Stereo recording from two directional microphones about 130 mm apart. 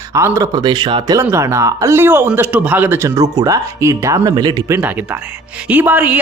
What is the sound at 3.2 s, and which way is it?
Speech, 25° right (ahead or behind).